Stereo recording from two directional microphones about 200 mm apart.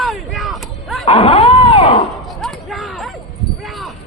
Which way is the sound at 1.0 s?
30° left (ahead or behind).